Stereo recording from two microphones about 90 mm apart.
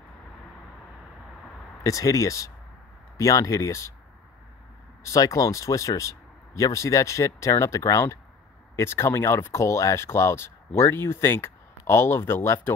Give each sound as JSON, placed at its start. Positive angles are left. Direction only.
{"t": 1.8, "sound": "speech", "side_deg": 40}
{"t": 5.0, "sound": "speech", "side_deg": 40}